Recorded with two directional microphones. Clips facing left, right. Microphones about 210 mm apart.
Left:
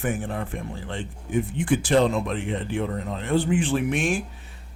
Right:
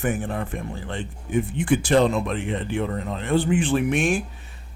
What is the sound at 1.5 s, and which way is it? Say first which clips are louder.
Speech: right 1 dB; 65° right (ahead or behind).